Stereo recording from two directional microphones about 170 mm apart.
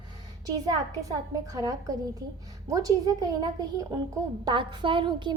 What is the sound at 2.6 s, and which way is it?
A woman's voice, 20° right (ahead or behind).